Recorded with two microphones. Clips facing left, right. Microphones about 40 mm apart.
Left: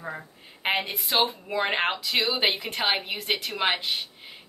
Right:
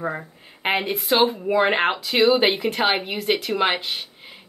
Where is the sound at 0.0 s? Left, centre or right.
Right.